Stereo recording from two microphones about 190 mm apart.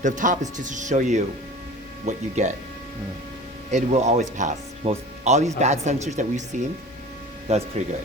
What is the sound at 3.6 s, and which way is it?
Speech, 35° right (ahead or behind).